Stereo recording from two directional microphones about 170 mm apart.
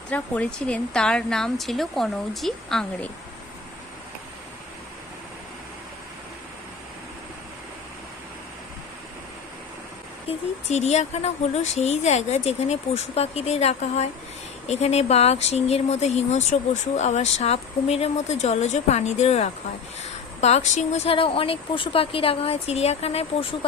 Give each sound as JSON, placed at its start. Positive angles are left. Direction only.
{"t": 0.1, "sound": "a woman's voice", "side_deg": 10}
{"t": 10.2, "sound": "speech", "side_deg": 40}